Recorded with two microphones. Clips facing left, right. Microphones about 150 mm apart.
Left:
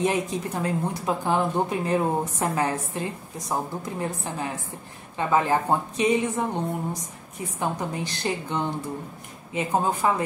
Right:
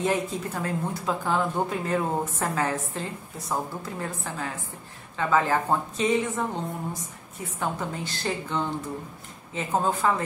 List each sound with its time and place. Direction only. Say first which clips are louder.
0.0 s a woman's voice: left 2 dB; 20° left (ahead or behind)